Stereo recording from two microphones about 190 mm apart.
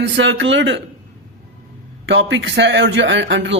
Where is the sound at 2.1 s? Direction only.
70° right (ahead or behind).